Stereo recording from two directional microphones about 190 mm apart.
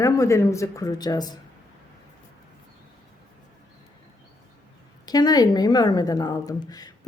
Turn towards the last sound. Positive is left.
turn(degrees=20)  # may be behind; listen again after turning